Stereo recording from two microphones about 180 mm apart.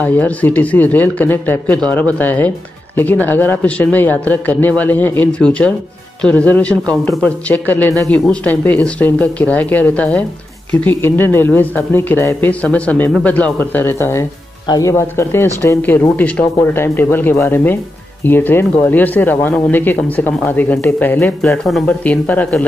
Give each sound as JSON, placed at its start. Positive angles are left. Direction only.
{"t": 0.0, "sound": "speech", "side_deg": 10}